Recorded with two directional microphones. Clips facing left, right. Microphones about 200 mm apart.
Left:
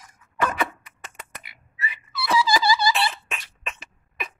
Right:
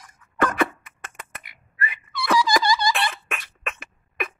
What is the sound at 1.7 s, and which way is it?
Dog, 55° right (ahead or behind).